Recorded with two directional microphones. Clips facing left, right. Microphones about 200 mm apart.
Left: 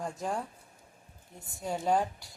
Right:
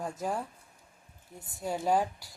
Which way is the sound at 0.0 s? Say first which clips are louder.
Right 1 dB; 5° right (ahead or behind).